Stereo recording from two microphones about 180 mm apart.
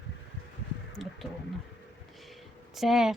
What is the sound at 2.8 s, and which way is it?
Speech, centre (ahead or behind).